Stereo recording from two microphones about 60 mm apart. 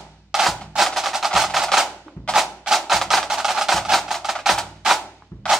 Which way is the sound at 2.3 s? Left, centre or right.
Centre.